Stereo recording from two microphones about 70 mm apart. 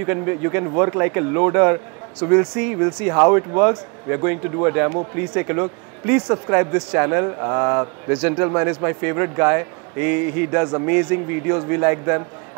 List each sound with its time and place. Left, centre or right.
0.0 s speech: right